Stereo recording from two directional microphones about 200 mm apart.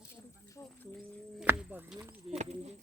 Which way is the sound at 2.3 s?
30° right (ahead or behind).